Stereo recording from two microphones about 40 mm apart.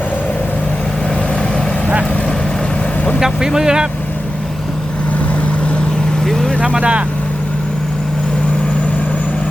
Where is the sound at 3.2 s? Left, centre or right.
Centre.